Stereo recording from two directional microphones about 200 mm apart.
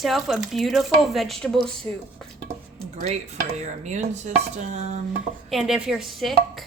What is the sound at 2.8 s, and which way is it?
Dishes, 35° right (ahead or behind).